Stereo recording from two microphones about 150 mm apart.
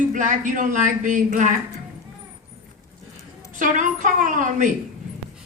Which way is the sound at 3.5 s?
60° right (ahead or behind).